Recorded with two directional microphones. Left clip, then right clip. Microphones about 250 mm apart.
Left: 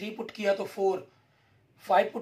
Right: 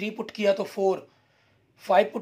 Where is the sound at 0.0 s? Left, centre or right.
Right.